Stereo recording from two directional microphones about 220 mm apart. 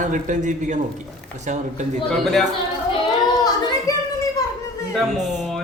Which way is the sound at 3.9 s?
15° left (ahead or behind).